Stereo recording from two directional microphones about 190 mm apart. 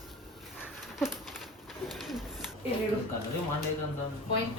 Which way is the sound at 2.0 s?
Centre (ahead or behind).